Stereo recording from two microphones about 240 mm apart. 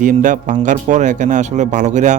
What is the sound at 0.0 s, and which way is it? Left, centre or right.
Speech, right.